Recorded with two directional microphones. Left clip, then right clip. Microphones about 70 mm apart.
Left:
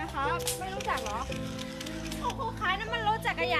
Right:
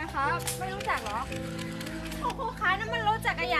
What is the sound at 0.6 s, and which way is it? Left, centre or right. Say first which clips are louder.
Speech: right 1 dB; centre.